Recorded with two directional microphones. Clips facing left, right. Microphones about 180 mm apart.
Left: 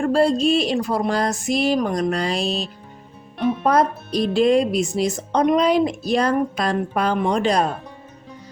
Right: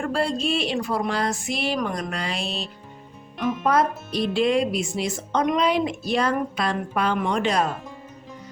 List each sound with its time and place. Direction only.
0.0 s speech: 40° left (ahead or behind)